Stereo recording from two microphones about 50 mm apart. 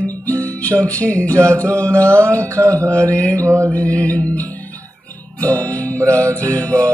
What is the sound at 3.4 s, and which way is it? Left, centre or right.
Music, right.